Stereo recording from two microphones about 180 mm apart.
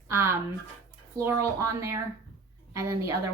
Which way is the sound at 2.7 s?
15° right (ahead or behind).